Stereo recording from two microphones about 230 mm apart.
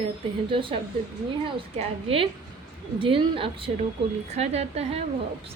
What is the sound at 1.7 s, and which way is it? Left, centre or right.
A woman's voice, right.